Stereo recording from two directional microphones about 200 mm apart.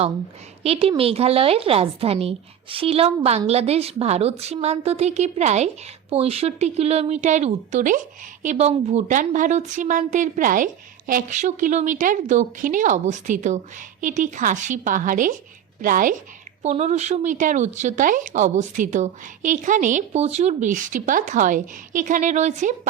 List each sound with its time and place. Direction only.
0.6 s a woman's voice: 30° right (ahead or behind)